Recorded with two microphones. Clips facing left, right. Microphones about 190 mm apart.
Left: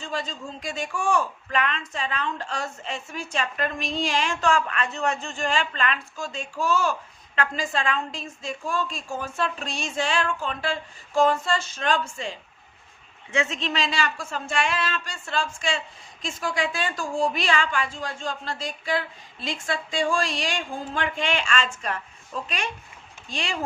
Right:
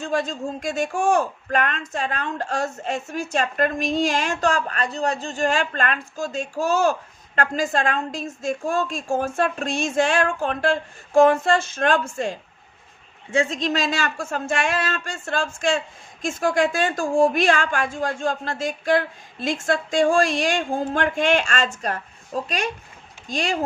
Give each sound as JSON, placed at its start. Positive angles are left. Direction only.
{"t": 0.0, "sound": "a woman's voice", "side_deg": -45}
{"t": 13.3, "sound": "a woman's voice", "side_deg": -35}